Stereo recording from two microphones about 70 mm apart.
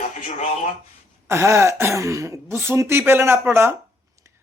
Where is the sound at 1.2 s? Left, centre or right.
Right.